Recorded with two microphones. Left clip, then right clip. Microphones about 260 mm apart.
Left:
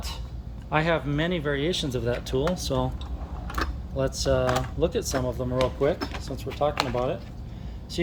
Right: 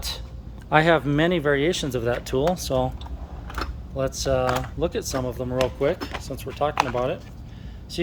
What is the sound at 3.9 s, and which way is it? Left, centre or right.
Speech, centre.